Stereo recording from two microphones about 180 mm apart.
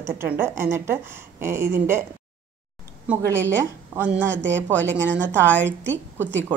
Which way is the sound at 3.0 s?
15° right (ahead or behind).